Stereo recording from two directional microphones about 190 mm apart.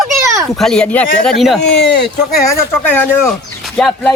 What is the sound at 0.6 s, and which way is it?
Speech, 5° left (ahead or behind).